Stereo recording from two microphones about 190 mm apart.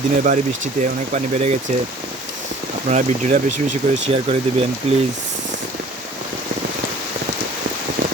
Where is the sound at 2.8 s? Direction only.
40° right (ahead or behind).